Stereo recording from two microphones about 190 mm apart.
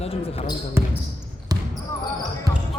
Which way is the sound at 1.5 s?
20° right (ahead or behind).